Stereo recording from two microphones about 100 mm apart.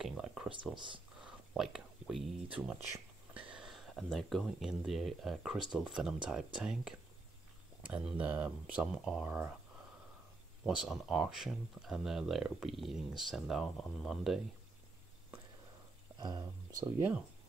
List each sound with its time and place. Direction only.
0.0 s a sound: 5° right (ahead or behind)
0.7 s speech: 55° right (ahead or behind)
1.2 s whispering: 5° right (ahead or behind)
2.5 s speech: 10° right (ahead or behind)
10.6 s speech: 5° right (ahead or behind)
16.2 s speech: 40° right (ahead or behind)